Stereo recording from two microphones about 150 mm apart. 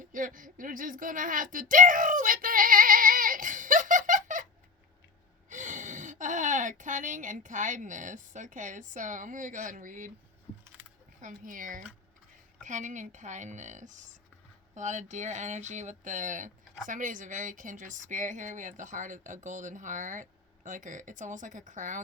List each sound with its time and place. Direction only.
0.0 s a sound: 65° right (ahead or behind)
5.5 s speech: 55° right (ahead or behind)
11.2 s speech: 60° right (ahead or behind)